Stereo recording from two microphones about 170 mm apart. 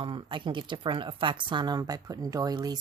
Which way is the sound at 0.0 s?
30° right (ahead or behind).